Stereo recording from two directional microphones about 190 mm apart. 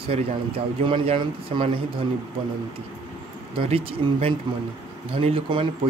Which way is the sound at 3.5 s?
30° right (ahead or behind).